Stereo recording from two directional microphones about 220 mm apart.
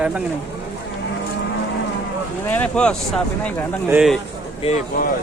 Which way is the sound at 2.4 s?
5° left (ahead or behind).